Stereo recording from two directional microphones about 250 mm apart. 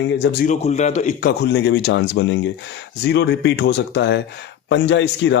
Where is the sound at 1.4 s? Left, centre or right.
Left.